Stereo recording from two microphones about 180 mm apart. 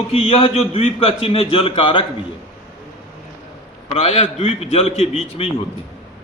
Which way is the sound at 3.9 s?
35° left (ahead or behind).